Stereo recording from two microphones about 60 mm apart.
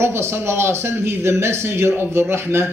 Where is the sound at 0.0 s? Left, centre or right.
Right.